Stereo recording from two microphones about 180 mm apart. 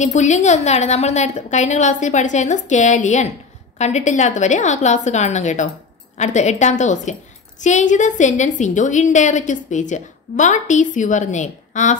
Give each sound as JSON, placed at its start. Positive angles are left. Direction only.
{"t": 0.0, "sound": "a woman's voice", "side_deg": 40}